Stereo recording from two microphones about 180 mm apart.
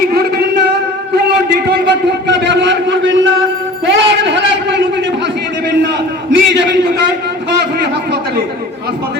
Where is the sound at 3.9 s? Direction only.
80° right.